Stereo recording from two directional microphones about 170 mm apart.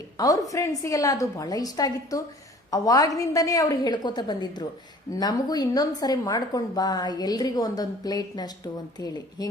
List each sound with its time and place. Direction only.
0.2 s speech: 20° left (ahead or behind)